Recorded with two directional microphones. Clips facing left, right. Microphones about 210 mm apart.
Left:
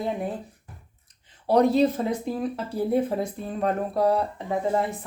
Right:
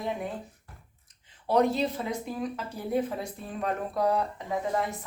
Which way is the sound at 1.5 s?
40° left (ahead or behind).